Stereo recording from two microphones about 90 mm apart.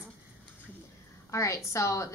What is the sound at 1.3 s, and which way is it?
Speech, 35° left (ahead or behind).